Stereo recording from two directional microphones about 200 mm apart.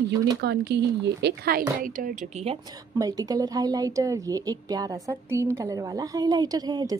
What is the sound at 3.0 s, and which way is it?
A woman's voice, 20° right (ahead or behind).